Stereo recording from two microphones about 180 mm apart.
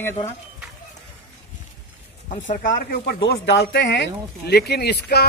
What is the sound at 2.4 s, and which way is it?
Speech, 50° left (ahead or behind).